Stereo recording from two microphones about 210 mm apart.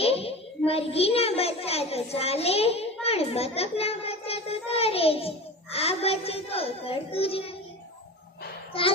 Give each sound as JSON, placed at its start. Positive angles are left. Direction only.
{"t": 0.0, "sound": "a child's voice", "side_deg": 30}
{"t": 8.7, "sound": "a child's voice", "side_deg": 25}